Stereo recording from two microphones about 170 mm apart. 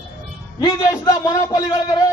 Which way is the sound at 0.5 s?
20° left (ahead or behind).